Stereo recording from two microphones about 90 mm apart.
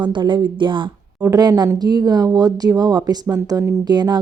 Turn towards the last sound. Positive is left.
turn(degrees=-50)  # may be behind; listen again after turning